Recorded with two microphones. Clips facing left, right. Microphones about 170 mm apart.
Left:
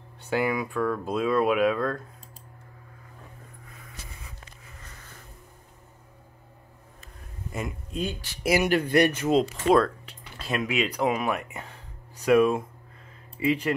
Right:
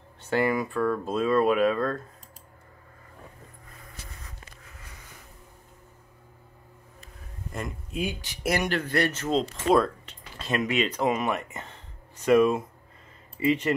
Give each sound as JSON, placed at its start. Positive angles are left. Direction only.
{"t": 0.2, "sound": "speech", "side_deg": 0}
{"t": 7.5, "sound": "speech", "side_deg": 0}
{"t": 8.0, "sound": "speech", "side_deg": -15}
{"t": 8.4, "sound": "speech", "side_deg": 5}